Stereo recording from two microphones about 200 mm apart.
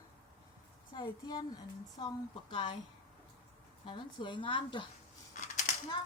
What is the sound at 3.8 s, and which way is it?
Speech, 25° left (ahead or behind).